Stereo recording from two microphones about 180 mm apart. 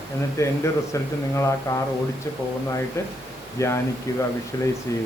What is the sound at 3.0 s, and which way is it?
Speech, 15° left (ahead or behind).